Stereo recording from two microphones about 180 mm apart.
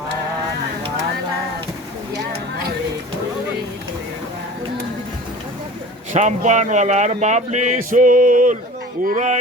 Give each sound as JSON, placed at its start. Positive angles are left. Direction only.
{"t": 6.1, "sound": "speech", "side_deg": -40}